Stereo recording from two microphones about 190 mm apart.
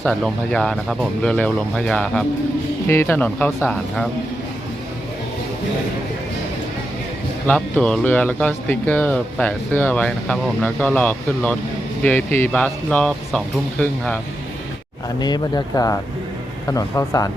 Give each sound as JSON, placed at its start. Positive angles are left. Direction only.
{"t": 0.0, "sound": "speech", "side_deg": 0}
{"t": 7.4, "sound": "speech", "side_deg": 5}
{"t": 15.2, "sound": "speech", "side_deg": 20}